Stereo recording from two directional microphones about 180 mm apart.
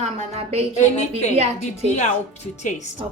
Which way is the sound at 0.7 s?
40° left (ahead or behind).